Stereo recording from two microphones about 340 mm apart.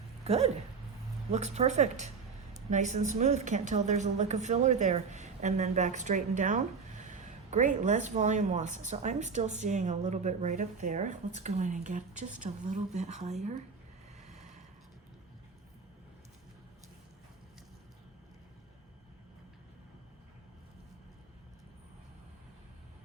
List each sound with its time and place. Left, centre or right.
0.3 s a woman's voice: centre
14.2 s boat: centre